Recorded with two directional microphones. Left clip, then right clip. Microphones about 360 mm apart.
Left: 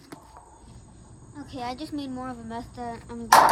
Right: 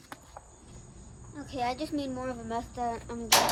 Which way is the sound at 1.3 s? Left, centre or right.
Centre.